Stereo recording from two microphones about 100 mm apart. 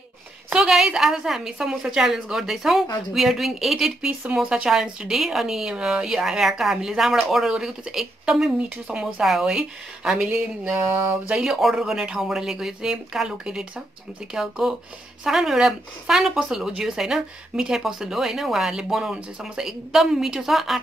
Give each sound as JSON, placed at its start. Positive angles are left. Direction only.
{"t": 0.5, "sound": "a woman's voice", "side_deg": -5}
{"t": 10.9, "sound": "speech", "side_deg": -20}
{"t": 11.3, "sound": "a woman's voice", "side_deg": -5}